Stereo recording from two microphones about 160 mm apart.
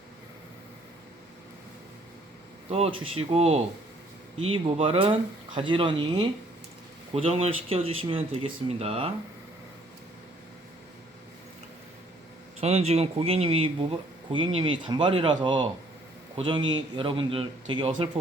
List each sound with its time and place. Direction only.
2.6 s speech: 40° right (ahead or behind)
12.5 s a man's voice: 40° right (ahead or behind)